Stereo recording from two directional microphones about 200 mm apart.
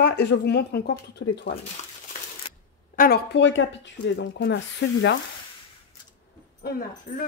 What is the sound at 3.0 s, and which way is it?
A woman's voice, 55° left (ahead or behind).